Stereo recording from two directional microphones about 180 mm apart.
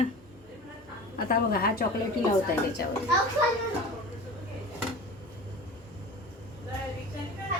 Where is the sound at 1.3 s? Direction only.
55° left (ahead or behind).